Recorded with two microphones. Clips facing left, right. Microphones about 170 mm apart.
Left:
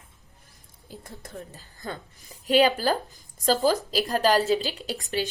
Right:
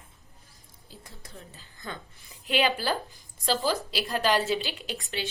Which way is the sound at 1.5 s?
40° left (ahead or behind).